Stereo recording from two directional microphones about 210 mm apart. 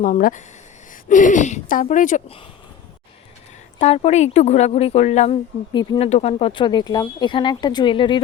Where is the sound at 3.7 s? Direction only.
30° left (ahead or behind).